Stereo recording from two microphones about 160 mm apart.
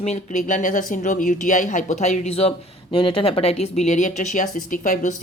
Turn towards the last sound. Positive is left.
turn(degrees=55)  # may be behind; listen again after turning